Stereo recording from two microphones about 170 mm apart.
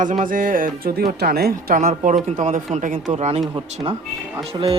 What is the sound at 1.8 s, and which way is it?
Speech, 45° right (ahead or behind).